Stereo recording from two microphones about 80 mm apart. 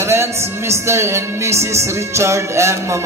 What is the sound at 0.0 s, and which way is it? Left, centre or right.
Music, right.